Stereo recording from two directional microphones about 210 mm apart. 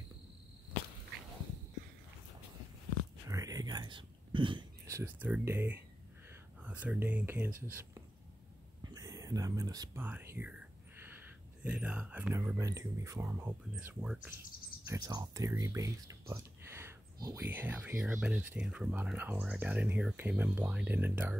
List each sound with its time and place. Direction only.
3.3 s whispering: 15° right (ahead or behind)
6.6 s speech: 5° right (ahead or behind)
14.9 s speech: 20° right (ahead or behind)